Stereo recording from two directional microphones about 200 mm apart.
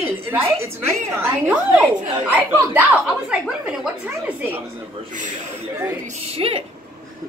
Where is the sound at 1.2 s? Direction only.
10° right (ahead or behind).